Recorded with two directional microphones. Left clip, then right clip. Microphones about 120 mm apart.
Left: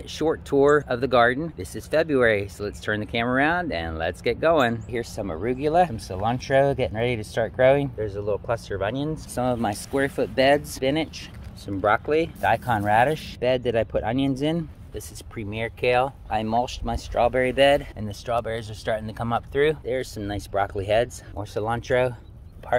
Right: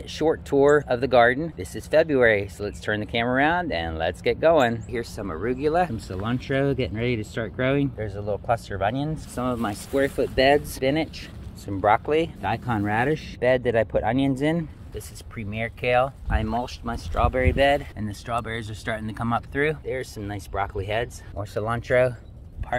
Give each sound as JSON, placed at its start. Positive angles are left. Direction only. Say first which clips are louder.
{"t": 0.1, "sound": "speech", "louder": "right 1 dB", "side_deg": 20}
{"t": 4.9, "sound": "speech", "louder": "left 1 dB", "side_deg": 40}
{"t": 5.9, "sound": "speech", "louder": "left 4 dB", "side_deg": 25}
{"t": 8.0, "sound": "speech", "louder": "left 2 dB", "side_deg": 15}
{"t": 9.3, "sound": "speech", "louder": "left 3 dB", "side_deg": 70}
{"t": 10.7, "sound": "speech", "louder": "even", "side_deg": 25}
{"t": 12.4, "sound": "speech", "louder": "left 5 dB", "side_deg": 30}
{"t": 15.0, "sound": "speech", "louder": "left 2 dB", "side_deg": 55}
{"t": 17.9, "sound": "speech", "louder": "left 2 dB", "side_deg": 25}
{"t": 19.9, "sound": "speech", "louder": "left 3 dB", "side_deg": 50}
{"t": 21.4, "sound": "speech", "louder": "left 1 dB", "side_deg": 25}
{"t": 22.7, "sound": "speech", "louder": "left 4 dB", "side_deg": 50}